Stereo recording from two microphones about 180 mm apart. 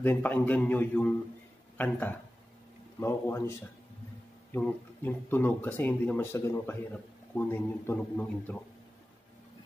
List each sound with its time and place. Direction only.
0.0 s speech: 10° left (ahead or behind)